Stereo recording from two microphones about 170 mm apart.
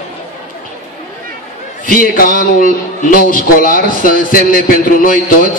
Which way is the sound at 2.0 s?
55° left (ahead or behind).